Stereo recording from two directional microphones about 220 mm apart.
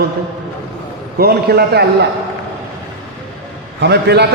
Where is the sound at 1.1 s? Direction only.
45° right (ahead or behind).